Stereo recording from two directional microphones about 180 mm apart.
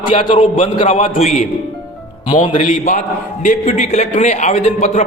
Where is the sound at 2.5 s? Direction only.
40° left (ahead or behind).